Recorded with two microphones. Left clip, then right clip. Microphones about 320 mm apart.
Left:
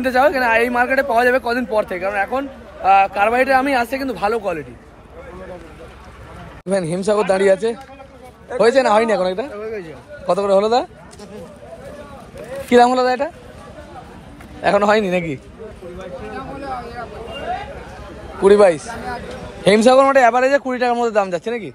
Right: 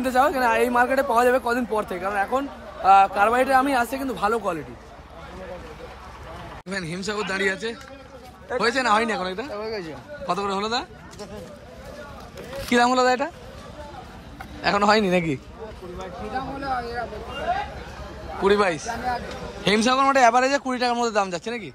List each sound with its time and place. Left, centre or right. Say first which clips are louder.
0.0 s speech: left 5 dB; centre
6.7 s speech: left 12 dB; centre
9.6 s speech: left 3 dB; right
10.2 s speech: left 10 dB; centre
12.6 s speech: left 6 dB; centre
14.6 s speech: left 5 dB; centre
16.3 s a sound: right 2 dB; right
18.4 s speech: left 9 dB; centre